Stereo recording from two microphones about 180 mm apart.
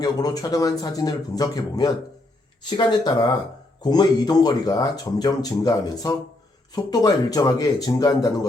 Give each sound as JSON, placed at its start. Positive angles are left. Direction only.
{"t": 0.0, "sound": "speech", "side_deg": 20}